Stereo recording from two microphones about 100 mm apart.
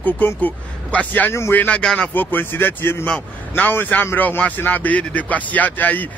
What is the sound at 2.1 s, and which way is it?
A man's voice, 20° left (ahead or behind).